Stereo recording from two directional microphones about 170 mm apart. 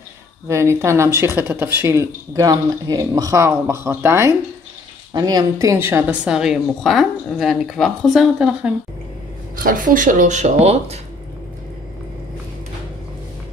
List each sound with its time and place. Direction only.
0.5 s a woman's voice: 15° right (ahead or behind)
9.6 s speech: 55° right (ahead or behind); by 11.0 s 40° right (ahead or behind)